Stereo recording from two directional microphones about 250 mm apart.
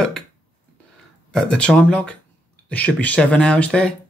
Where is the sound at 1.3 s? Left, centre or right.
Centre.